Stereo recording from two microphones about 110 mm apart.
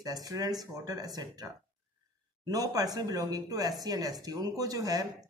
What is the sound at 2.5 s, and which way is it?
Speech, 35° right (ahead or behind).